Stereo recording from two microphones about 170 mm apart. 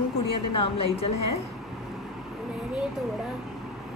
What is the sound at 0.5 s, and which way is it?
Speech, 30° left (ahead or behind).